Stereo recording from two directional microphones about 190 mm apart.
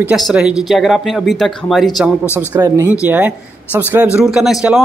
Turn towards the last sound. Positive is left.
turn(degrees=0)  # may be behind; listen again after turning